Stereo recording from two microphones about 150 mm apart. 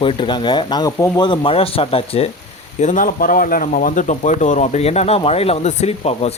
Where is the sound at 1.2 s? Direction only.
35° left (ahead or behind).